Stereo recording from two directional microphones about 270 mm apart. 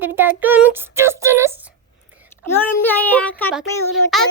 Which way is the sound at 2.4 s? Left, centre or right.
Centre.